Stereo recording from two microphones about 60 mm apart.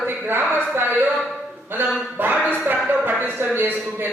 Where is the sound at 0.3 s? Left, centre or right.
Right.